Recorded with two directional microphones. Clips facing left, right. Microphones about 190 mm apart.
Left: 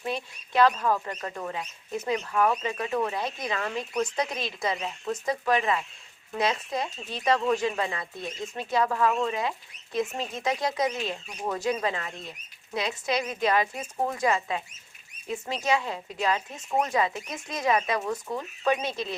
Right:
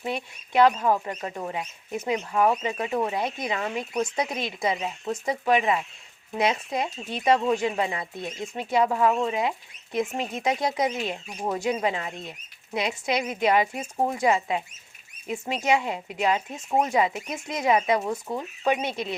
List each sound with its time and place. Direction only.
0.0 s speech: 15° right (ahead or behind)
4.1 s speech: 25° right (ahead or behind)